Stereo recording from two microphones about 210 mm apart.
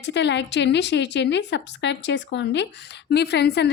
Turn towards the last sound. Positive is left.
turn(degrees=55)  # may be behind; listen again after turning